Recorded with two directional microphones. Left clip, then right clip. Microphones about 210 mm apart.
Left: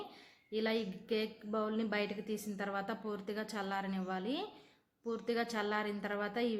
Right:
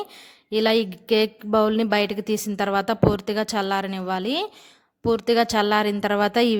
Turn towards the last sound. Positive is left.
turn(degrees=-50)  # may be behind; listen again after turning